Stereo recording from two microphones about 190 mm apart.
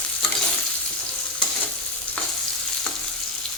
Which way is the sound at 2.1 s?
10° left (ahead or behind).